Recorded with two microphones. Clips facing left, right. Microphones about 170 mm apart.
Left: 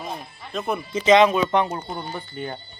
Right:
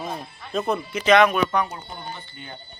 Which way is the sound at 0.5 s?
Centre (ahead or behind).